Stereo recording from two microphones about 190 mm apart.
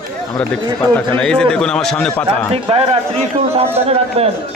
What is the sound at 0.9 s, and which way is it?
A man's voice, 5° left (ahead or behind).